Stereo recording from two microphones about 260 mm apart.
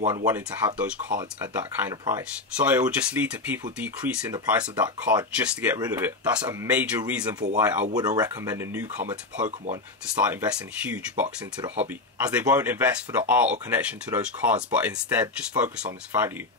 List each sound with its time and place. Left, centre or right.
0.1 s speech: centre
11.2 s speech: right
12.2 s speech: centre